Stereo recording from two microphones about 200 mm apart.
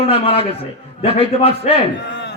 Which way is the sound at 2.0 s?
60° left (ahead or behind).